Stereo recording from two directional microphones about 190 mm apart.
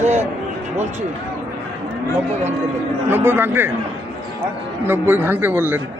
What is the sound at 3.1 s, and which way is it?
Speech, 10° right (ahead or behind).